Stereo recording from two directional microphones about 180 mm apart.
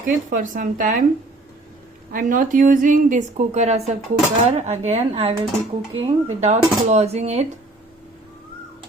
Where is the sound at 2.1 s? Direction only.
50° right (ahead or behind).